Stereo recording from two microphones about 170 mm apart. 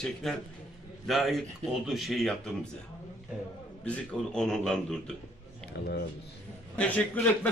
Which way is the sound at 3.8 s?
5° left (ahead or behind).